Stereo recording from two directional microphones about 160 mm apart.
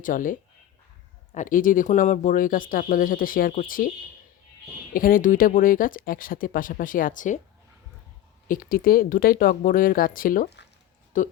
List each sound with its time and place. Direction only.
0.0 s speech: 55° left (ahead or behind)
4.9 s speech: 60° left (ahead or behind)
8.4 s speech: 65° left (ahead or behind)
11.1 s speech: 55° left (ahead or behind)